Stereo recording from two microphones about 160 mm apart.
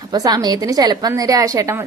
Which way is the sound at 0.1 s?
25° right (ahead or behind).